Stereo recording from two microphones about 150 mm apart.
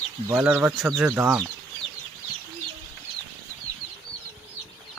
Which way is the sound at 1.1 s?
15° right (ahead or behind).